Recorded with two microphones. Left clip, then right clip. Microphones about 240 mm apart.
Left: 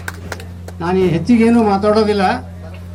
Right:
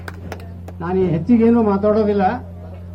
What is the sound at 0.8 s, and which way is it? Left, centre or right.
Speech, left.